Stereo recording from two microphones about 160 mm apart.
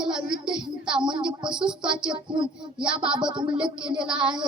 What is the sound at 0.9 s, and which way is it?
A woman's voice, 30° right (ahead or behind).